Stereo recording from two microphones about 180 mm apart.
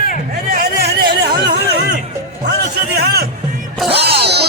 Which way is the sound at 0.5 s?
65° right (ahead or behind).